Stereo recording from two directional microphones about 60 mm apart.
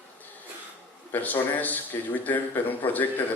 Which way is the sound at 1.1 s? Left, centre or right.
Left.